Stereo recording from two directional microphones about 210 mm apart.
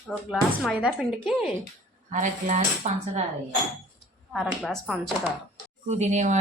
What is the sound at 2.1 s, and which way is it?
Speech, 40° right (ahead or behind).